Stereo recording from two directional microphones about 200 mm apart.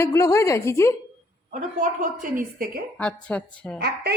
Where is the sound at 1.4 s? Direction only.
40° right (ahead or behind).